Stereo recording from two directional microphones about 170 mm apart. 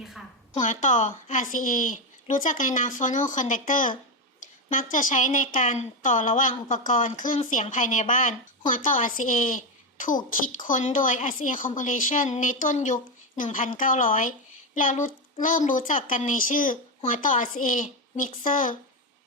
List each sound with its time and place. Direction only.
0.6 s a woman's voice: 45° left (ahead or behind)